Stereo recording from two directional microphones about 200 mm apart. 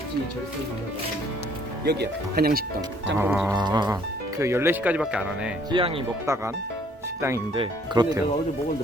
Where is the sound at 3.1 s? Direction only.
10° right (ahead or behind).